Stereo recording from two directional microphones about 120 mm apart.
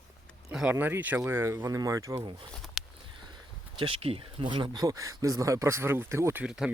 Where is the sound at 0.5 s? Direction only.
10° right (ahead or behind); by 2.2 s 25° right (ahead or behind).